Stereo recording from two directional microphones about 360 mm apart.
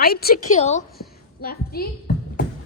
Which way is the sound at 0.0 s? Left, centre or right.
Left.